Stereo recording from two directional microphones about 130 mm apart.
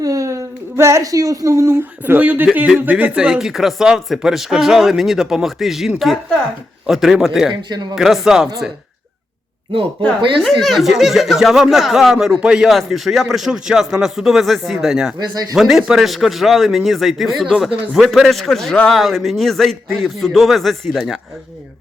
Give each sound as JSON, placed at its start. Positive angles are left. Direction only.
{"t": 0.0, "sound": "speech", "side_deg": -25}
{"t": 10.2, "sound": "speech", "side_deg": -40}
{"t": 10.6, "sound": "speech", "side_deg": 0}